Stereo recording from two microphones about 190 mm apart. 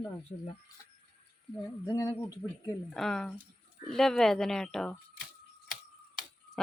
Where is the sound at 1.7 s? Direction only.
15° left (ahead or behind).